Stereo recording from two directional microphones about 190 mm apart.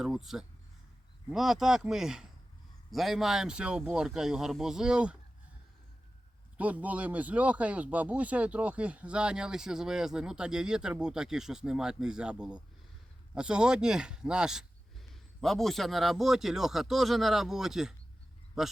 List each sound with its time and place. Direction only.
0.0 s speech: centre (ahead or behind)
6.6 s speech: 5° right (ahead or behind)